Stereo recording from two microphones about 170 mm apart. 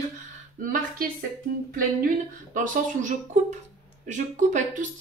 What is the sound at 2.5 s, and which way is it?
Speech, 45° right (ahead or behind).